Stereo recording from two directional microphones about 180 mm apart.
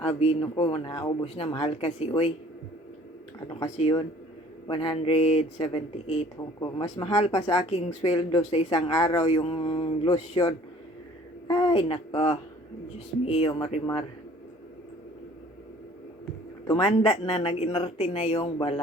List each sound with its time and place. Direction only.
0.0 s speech: 35° left (ahead or behind)
3.8 s a woman's voice: 25° left (ahead or behind)
16.6 s speech: 30° left (ahead or behind)